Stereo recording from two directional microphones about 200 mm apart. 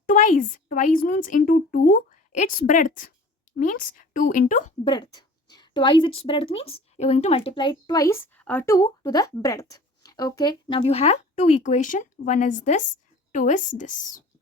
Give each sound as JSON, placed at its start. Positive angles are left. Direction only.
{"t": 0.0, "sound": "a woman's voice", "side_deg": 40}
{"t": 4.9, "sound": "a woman's voice", "side_deg": 20}